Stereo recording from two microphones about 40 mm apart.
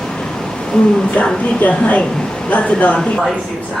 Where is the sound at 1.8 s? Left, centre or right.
Left.